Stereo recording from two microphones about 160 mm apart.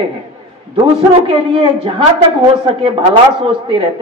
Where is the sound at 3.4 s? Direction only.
30° right (ahead or behind).